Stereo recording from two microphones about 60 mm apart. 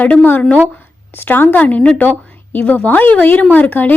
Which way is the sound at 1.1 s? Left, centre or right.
Left.